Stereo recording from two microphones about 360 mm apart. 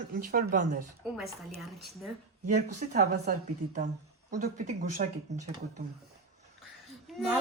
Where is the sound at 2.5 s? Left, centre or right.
Centre.